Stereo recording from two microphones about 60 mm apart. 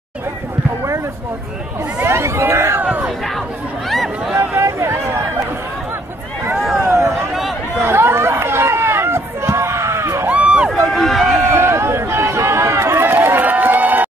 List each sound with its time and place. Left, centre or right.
2.0 s speech: right
2.8 s crowd: right
4.6 s chatter: right
6.8 s a sound: right
7.8 s chatter: right
10.2 s a sound: right
10.7 s run: centre
11.5 s run: right